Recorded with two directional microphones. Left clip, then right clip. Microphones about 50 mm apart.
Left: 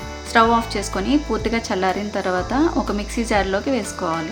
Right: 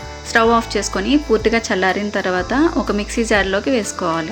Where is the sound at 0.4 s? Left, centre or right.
Right.